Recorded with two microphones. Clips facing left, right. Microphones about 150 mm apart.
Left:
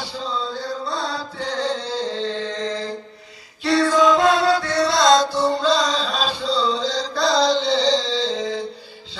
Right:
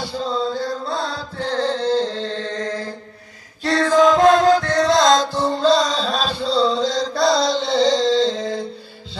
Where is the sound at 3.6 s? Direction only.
45° right (ahead or behind).